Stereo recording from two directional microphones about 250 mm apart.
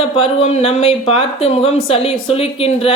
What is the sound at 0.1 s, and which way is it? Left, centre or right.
Speech, left.